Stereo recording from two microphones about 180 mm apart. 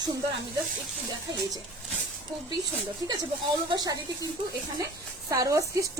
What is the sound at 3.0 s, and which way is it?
Speech, 20° right (ahead or behind).